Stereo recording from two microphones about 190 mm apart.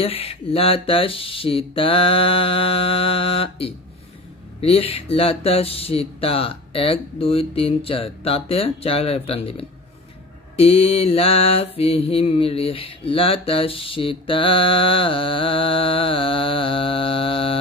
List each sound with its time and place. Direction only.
0.0 s mantra: 30° left (ahead or behind)
4.6 s speech: 30° left (ahead or behind)
10.6 s mantra: 30° left (ahead or behind)